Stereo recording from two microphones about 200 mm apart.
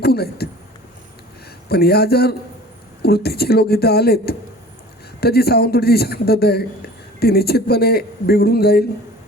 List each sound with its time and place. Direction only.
0.0 s speech: 50° left (ahead or behind)
1.7 s speech: 50° left (ahead or behind)